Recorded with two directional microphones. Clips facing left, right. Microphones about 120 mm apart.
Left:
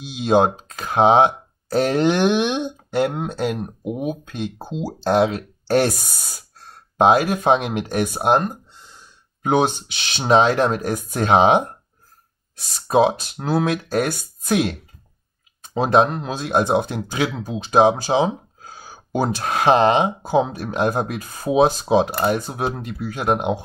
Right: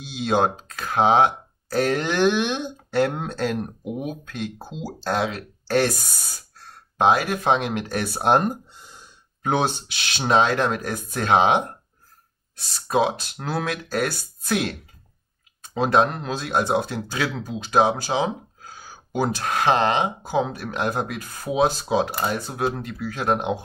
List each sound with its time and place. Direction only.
0.0 s speech: 15° left (ahead or behind)
7.0 s speech: 25° left (ahead or behind)
8.3 s a sound: 5° right (ahead or behind)
9.4 s speech: 15° left (ahead or behind)
12.8 s speech: 20° left (ahead or behind)